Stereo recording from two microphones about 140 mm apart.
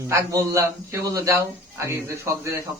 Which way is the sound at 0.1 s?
20° right (ahead or behind).